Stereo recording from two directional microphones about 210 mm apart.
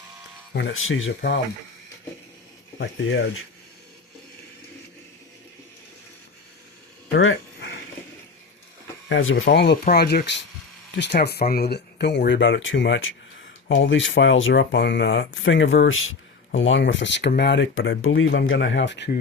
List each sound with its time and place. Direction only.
0.5 s speech: 65° left (ahead or behind)
2.7 s speech: 60° left (ahead or behind)
7.2 s a sound: 60° left (ahead or behind)
9.0 s speech: 60° left (ahead or behind)